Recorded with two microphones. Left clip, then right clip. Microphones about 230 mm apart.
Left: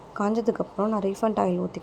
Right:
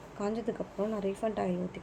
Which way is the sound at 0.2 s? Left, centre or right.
Left.